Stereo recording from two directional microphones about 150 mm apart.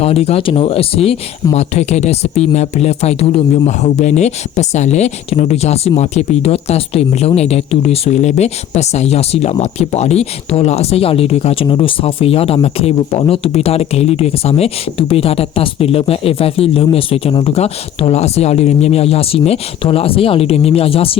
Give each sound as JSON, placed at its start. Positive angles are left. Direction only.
{"t": 0.0, "sound": "speech", "side_deg": 40}